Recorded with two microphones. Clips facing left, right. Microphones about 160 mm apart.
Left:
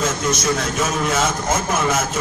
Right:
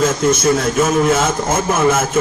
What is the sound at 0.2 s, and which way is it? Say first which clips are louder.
A man's voice: right 6 dB; 55° right (ahead or behind).